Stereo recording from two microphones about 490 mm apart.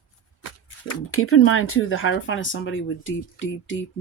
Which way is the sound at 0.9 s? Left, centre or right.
Left.